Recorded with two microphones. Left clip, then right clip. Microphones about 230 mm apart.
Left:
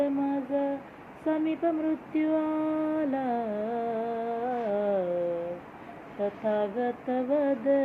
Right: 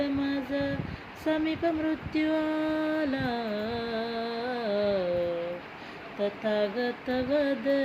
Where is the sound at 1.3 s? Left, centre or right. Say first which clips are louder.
Even; centre.